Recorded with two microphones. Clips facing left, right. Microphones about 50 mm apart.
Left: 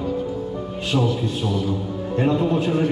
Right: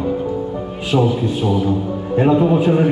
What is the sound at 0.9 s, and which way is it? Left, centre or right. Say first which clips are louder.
A man's voice: right 5 dB; centre.